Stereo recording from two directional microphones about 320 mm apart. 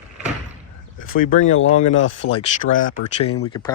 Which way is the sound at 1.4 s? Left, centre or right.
Left.